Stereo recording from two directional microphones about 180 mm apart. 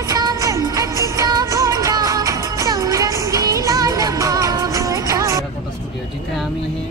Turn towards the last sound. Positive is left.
turn(degrees=-15)  # may be behind; listen again after turning